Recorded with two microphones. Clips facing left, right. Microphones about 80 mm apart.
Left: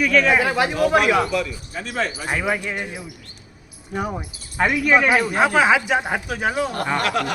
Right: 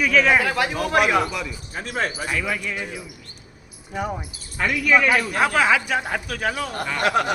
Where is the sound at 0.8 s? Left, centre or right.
Centre.